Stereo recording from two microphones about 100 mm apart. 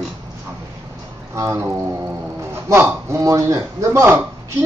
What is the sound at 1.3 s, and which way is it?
Speech, 30° right (ahead or behind).